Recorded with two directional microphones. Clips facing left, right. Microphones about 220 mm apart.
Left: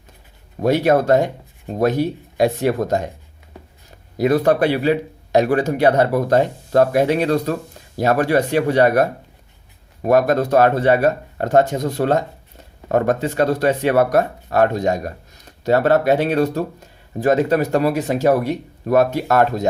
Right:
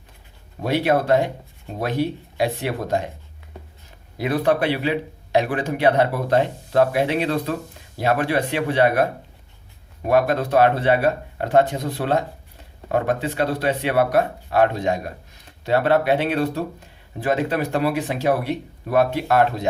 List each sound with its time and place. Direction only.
0.6 s speech: 45° left (ahead or behind)
4.2 s speech: 40° left (ahead or behind)
10.1 s speech: 45° left (ahead or behind)